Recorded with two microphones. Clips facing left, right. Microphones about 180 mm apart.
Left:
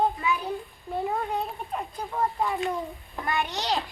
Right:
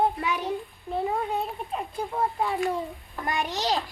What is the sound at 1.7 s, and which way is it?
Speech, 10° right (ahead or behind).